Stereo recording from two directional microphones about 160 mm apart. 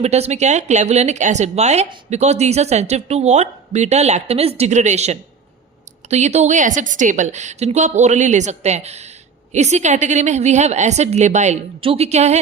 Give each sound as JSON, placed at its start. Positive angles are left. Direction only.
{"t": 0.0, "sound": "a woman's voice", "side_deg": -45}